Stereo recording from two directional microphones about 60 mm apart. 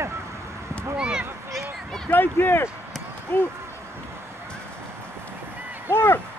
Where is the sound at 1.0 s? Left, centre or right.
Centre.